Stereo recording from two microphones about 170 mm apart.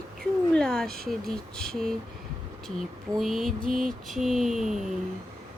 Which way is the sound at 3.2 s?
Centre (ahead or behind).